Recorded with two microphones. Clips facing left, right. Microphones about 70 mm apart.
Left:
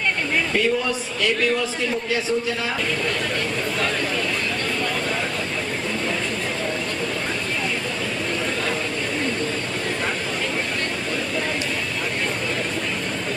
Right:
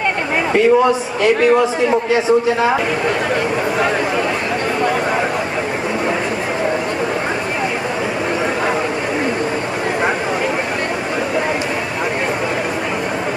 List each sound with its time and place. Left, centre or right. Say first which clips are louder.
0.5 s a man's voice: right 13 dB; right